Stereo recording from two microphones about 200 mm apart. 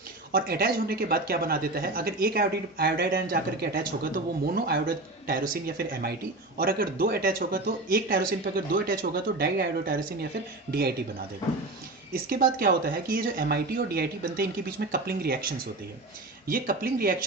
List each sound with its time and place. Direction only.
0.3 s speech: 50° right (ahead or behind)
12.1 s speech: 45° right (ahead or behind)